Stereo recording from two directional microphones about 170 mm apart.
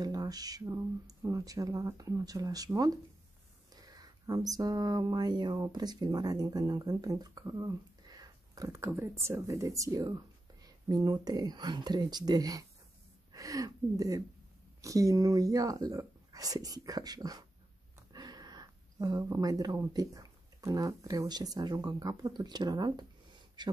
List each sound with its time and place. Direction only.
0.0 s speech: 20° right (ahead or behind)